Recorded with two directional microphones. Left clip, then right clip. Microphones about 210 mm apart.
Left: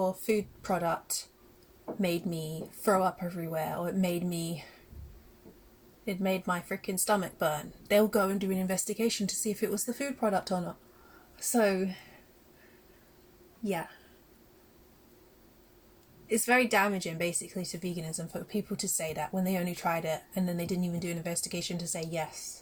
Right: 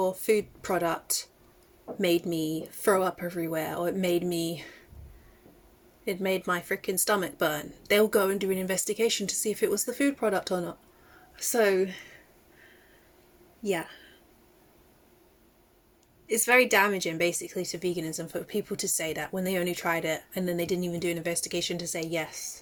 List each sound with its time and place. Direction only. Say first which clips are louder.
0.0 s speech: right 4 dB; 45° right (ahead or behind)
6.1 s speech: right 3 dB; 45° right (ahead or behind)
16.3 s speech: right 4 dB; 45° right (ahead or behind)